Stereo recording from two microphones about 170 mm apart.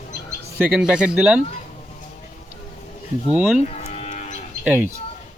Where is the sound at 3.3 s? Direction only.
10° right (ahead or behind).